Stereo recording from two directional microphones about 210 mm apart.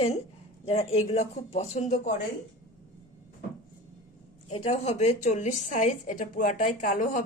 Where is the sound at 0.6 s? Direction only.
30° left (ahead or behind).